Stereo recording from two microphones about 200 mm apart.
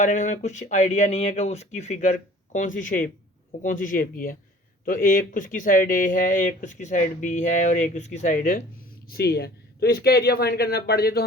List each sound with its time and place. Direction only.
0.0 s speech: 40° left (ahead or behind)